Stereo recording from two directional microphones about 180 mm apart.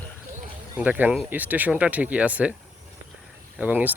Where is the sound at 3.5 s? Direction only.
10° right (ahead or behind).